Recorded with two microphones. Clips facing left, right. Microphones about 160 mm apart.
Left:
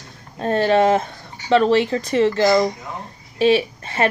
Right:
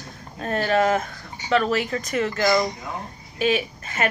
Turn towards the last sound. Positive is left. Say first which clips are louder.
# left 5 dB
turn(degrees=30)  # may be behind; listen again after turning